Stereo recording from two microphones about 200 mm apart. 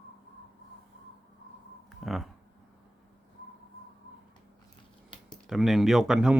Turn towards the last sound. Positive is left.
turn(degrees=-5)  # may be behind; listen again after turning